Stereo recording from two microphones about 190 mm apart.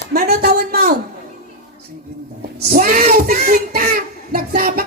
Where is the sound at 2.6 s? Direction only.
50° right (ahead or behind).